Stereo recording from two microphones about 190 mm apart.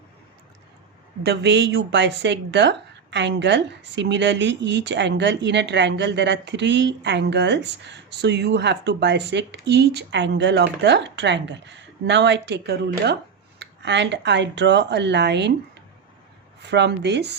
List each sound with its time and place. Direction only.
1.2 s speech: 60° right (ahead or behind)
16.6 s speech: 65° right (ahead or behind)